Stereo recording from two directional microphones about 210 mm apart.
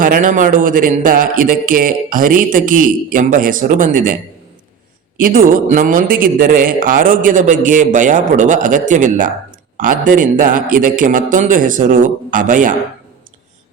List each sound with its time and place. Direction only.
0.0 s a man's voice: 40° right (ahead or behind)